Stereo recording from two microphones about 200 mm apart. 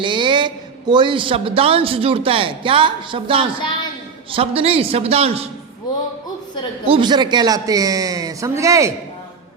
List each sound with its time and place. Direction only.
0.0 s a man's voice: 25° right (ahead or behind)
6.8 s a man's voice: 25° right (ahead or behind)